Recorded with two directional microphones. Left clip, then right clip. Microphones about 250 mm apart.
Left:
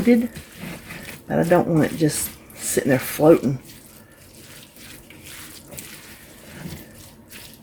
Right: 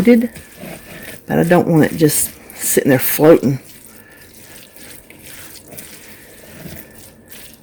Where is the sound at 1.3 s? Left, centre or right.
Right.